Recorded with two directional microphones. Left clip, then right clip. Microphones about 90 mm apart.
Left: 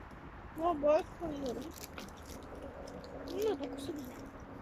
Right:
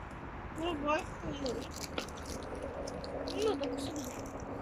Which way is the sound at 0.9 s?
70° left (ahead or behind).